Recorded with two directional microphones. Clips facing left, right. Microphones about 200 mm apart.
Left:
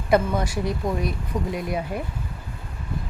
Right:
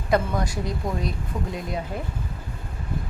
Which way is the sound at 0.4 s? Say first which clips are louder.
Left 3 dB; 20° right (ahead or behind).